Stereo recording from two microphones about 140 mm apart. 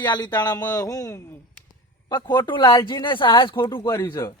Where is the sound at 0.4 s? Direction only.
30° left (ahead or behind).